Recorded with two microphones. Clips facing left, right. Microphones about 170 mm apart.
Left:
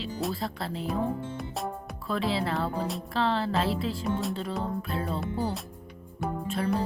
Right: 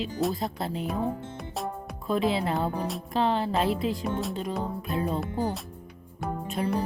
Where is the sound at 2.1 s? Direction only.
20° right (ahead or behind).